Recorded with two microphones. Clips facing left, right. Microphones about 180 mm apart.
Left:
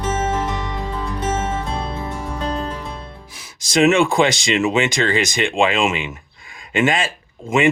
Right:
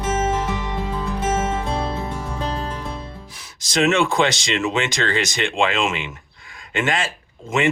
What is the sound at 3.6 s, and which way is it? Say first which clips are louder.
Speech: left 4 dB; 10° left (ahead or behind).